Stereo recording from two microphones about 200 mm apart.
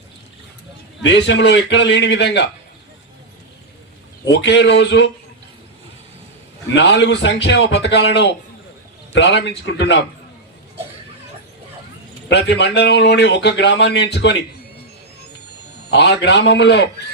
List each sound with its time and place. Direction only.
1.0 s speech: 60° left (ahead or behind)
4.3 s speech: 60° left (ahead or behind)
6.7 s speech: 60° left (ahead or behind)
12.3 s speech: 60° left (ahead or behind)
15.9 s speech: 60° left (ahead or behind)